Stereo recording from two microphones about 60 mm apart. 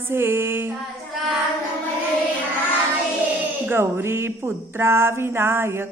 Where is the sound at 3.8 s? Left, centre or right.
Right.